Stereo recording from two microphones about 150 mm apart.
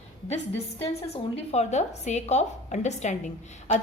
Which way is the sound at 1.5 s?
50° left (ahead or behind).